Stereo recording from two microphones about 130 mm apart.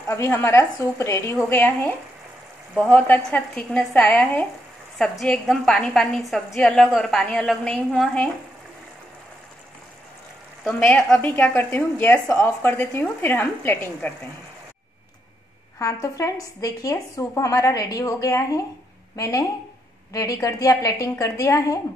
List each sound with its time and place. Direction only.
0.1 s a woman's voice: 20° left (ahead or behind)
2.7 s a woman's voice: centre (ahead or behind)
3.0 s a woman's voice: 10° left (ahead or behind)
10.6 s speech: 10° left (ahead or behind)
15.8 s a woman's voice: 25° left (ahead or behind)